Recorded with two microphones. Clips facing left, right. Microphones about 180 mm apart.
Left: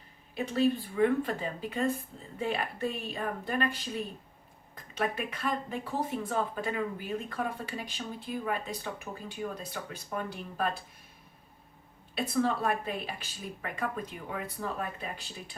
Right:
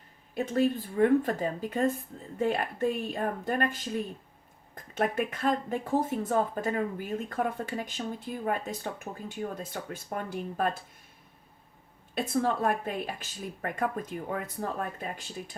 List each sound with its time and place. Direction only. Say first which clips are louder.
0.3 s a woman's voice: right 1 dB; 45° right (ahead or behind)
12.1 s a woman's voice: right 1 dB; 50° right (ahead or behind)